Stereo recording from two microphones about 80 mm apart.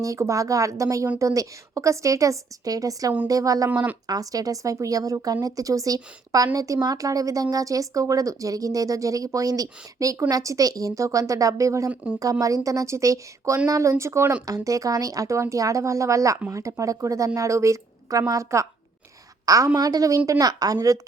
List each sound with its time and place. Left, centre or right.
0.0 s speech: right
3.7 s speech: right
4.0 s speech: right
14.4 s speech: right